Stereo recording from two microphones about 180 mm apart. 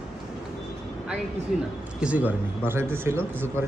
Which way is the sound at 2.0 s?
10° right (ahead or behind).